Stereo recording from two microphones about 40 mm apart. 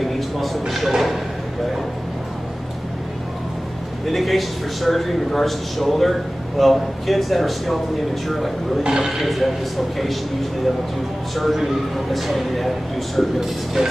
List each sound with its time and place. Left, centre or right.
0.0 s speech: centre
4.0 s a man's voice: centre
8.8 s a man's voice: centre
9.1 s a man's voice: centre
11.3 s a man's voice: centre
13.8 s a man's voice: centre